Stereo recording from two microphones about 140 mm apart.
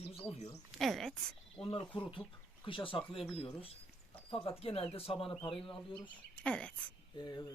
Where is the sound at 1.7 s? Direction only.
35° left (ahead or behind).